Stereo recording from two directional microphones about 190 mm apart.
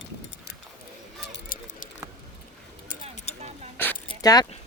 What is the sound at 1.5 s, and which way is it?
Keys jangling, 45° left (ahead or behind).